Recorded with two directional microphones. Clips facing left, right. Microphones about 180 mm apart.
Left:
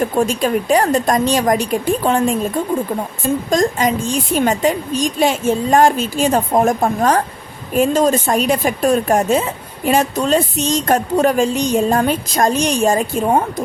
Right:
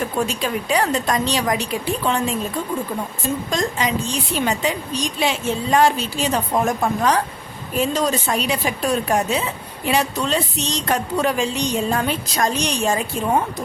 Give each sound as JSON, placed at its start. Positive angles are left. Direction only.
{"t": 0.0, "sound": "speech", "side_deg": 50}
{"t": 3.5, "sound": "speech", "side_deg": 45}